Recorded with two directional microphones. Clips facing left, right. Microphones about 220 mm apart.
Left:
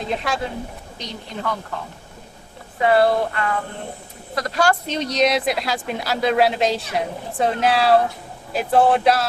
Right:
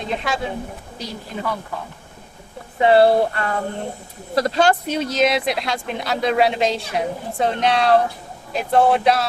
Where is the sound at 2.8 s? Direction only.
30° right (ahead or behind).